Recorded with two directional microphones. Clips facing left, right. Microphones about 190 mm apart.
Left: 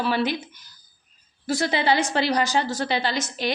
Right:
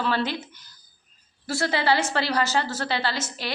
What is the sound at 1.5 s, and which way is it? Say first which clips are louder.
A woman's voice: left 1 dB; 15° left (ahead or behind).